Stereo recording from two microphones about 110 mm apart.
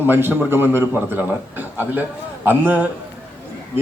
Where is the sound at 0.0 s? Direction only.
20° right (ahead or behind).